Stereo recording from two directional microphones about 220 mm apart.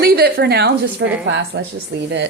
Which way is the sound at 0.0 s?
45° right (ahead or behind).